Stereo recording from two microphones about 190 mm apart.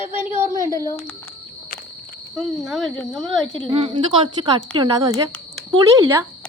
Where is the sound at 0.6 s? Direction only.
15° left (ahead or behind).